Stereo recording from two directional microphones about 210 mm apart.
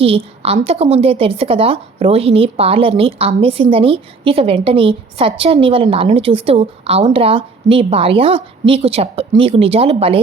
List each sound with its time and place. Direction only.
0.0 s a woman's voice: 25° right (ahead or behind)